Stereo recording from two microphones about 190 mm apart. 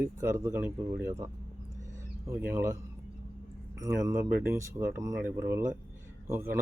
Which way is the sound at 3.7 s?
15° right (ahead or behind).